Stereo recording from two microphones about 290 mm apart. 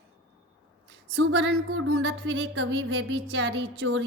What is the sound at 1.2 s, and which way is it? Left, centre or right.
A woman's voice, right.